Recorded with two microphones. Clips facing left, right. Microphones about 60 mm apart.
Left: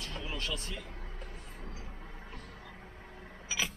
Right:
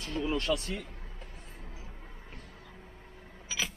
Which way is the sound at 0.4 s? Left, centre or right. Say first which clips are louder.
Right 7 dB; right.